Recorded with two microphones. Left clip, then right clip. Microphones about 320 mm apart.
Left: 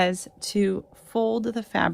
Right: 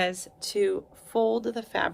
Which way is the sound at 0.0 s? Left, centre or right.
Centre.